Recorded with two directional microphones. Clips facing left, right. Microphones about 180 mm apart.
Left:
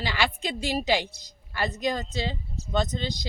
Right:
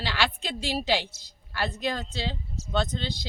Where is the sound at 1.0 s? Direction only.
60° left (ahead or behind).